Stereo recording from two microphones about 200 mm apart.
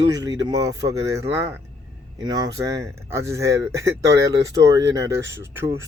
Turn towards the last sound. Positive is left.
turn(degrees=-10)  # may be behind; listen again after turning